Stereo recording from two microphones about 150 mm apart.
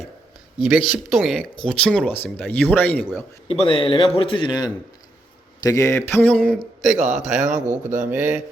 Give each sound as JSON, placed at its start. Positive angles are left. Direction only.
{"t": 0.8, "sound": "speech", "side_deg": 0}
{"t": 3.5, "sound": "a man's voice", "side_deg": 40}
{"t": 6.5, "sound": "speech", "side_deg": 0}
{"t": 7.4, "sound": "a man's voice", "side_deg": -60}
{"t": 8.0, "sound": "speech", "side_deg": -15}